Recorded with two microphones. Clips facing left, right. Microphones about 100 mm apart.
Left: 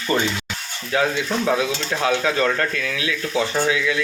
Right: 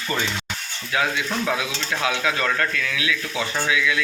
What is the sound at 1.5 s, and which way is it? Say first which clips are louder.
Speech: left 4 dB; 30° left (ahead or behind).